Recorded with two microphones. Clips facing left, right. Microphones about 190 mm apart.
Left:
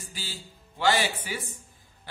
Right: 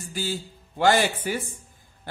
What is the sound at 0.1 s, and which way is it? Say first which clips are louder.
Speech: right 15 dB; 50° right (ahead or behind).